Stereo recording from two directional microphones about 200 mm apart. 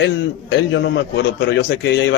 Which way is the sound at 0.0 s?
60° left (ahead or behind).